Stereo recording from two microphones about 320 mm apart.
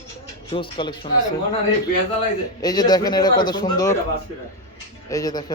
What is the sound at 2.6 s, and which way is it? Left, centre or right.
A man's voice, centre.